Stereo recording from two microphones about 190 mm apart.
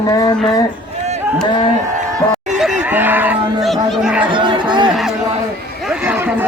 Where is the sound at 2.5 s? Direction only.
5° right (ahead or behind).